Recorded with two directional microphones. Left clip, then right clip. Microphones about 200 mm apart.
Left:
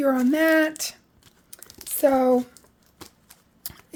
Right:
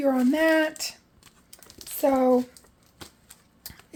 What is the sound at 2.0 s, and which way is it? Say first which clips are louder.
Speech: left 2 dB; 45° left (ahead or behind).